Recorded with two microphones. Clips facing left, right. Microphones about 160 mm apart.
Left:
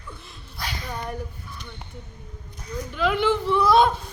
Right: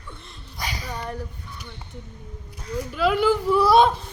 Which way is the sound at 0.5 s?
15° right (ahead or behind).